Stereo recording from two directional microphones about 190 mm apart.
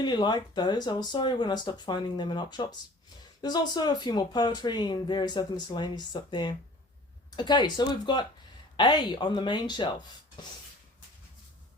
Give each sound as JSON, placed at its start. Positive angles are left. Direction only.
{"t": 0.0, "sound": "speech", "side_deg": 20}